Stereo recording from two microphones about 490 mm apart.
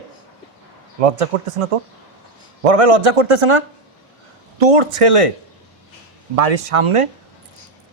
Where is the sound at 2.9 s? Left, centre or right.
Right.